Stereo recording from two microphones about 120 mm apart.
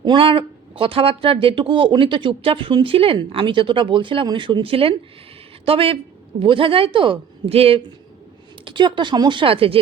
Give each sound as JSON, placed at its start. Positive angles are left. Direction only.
{"t": 0.0, "sound": "speech", "side_deg": -40}
{"t": 8.6, "sound": "speech", "side_deg": -40}